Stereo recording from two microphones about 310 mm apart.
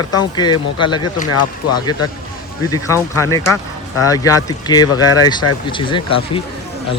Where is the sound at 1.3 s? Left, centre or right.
Left.